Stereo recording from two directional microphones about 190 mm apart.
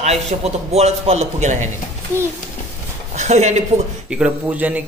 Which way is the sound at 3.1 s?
35° right (ahead or behind).